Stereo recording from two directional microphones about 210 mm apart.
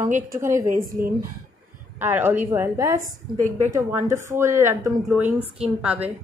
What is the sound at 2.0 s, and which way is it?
A woman's voice, 10° right (ahead or behind).